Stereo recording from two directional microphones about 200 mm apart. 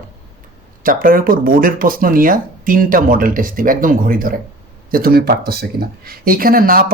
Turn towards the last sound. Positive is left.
turn(degrees=-45)  # may be behind; listen again after turning